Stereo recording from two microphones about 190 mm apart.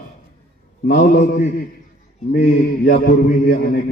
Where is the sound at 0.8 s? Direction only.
45° left (ahead or behind).